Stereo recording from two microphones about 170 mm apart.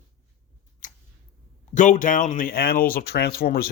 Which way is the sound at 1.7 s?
50° left (ahead or behind).